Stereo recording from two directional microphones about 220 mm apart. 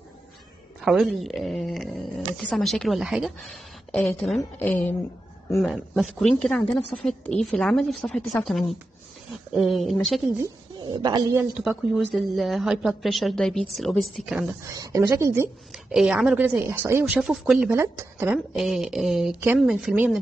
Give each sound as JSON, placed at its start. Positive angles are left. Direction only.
{"t": 0.7, "sound": "a woman's voice", "side_deg": 0}
{"t": 10.4, "sound": "speech", "side_deg": -20}
{"t": 11.5, "sound": "a woman's voice", "side_deg": -5}
{"t": 14.8, "sound": "a woman's voice", "side_deg": -15}